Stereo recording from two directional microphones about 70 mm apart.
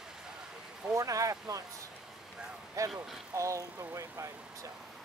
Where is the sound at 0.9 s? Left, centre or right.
Right.